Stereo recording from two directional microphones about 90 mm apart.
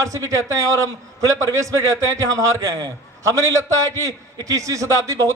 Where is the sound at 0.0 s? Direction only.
35° right (ahead or behind).